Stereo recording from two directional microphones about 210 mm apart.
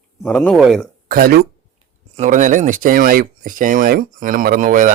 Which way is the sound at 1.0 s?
45° right (ahead or behind).